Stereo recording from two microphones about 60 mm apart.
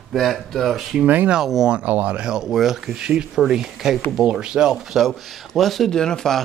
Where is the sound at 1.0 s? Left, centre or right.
Right.